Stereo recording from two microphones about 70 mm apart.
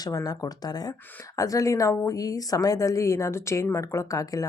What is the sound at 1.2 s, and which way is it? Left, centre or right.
A woman's voice, left.